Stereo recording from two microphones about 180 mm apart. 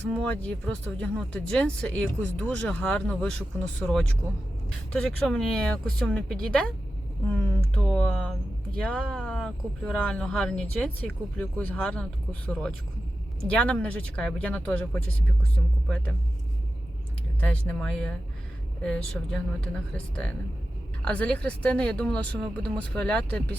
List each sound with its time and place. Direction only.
0.1 s speech: 5° left (ahead or behind)
7.7 s speech: 5° left (ahead or behind)
17.4 s speech: 5° left (ahead or behind)